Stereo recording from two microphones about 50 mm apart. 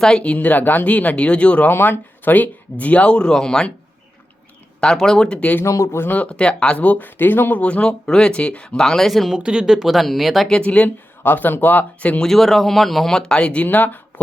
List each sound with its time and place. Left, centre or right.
0.3 s speech: left
1.7 s speech: left; by 3.7 s centre
4.8 s speech: centre
5.6 s speech: left
6.1 s speech: left
6.7 s speech: left
7.6 s speech: left; by 9.3 s centre
9.3 s speech: centre
10.6 s speech: left
10.8 s speech: left
12.2 s speech: centre; by 13.7 s left
13.7 s speech: left